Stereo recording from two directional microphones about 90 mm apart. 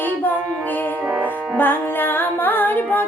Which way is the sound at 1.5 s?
20° left (ahead or behind).